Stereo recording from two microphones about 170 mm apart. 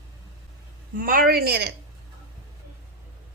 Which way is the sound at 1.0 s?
55° right (ahead or behind).